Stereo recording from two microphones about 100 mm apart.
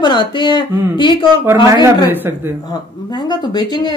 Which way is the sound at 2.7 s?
45° left (ahead or behind).